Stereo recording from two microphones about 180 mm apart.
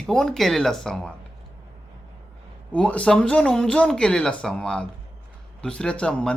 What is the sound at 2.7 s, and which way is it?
Speech, 5° left (ahead or behind).